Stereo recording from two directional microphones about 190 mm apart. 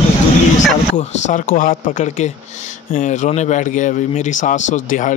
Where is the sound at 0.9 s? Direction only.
40° left (ahead or behind).